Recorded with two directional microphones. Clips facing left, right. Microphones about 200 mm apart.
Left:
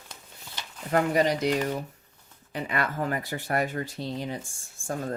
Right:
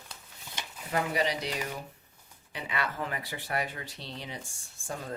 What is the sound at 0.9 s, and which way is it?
Speech, 45° left (ahead or behind).